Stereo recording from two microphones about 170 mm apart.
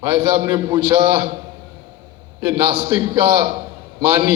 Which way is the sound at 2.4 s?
30° right (ahead or behind).